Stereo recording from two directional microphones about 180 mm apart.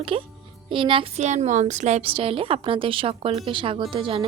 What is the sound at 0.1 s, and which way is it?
A woman's voice, 30° right (ahead or behind).